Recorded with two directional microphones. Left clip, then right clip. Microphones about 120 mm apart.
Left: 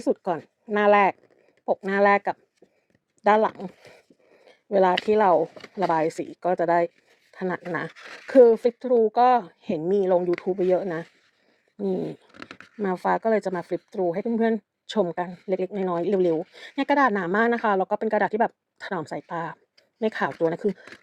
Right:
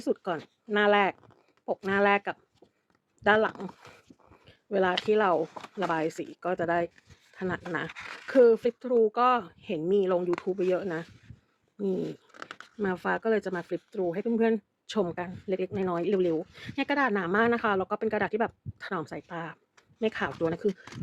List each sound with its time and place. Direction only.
0.0 s a woman's voice: 35° left (ahead or behind)
4.4 s a sound: 45° left (ahead or behind)
5.1 s a woman's voice: 40° left (ahead or behind)
10.2 s speech: 25° left (ahead or behind)
10.6 s a woman's voice: 40° left (ahead or behind)
16.6 s speech: 45° left (ahead or behind)